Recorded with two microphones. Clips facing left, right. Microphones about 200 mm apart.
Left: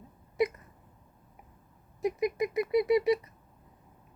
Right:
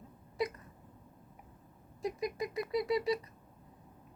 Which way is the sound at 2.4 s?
20° left (ahead or behind).